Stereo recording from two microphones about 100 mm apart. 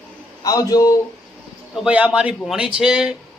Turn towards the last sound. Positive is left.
turn(degrees=-5)  # may be behind; listen again after turning